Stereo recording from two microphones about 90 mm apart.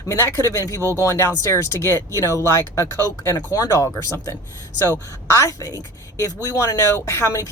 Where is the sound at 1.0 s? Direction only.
30° left (ahead or behind).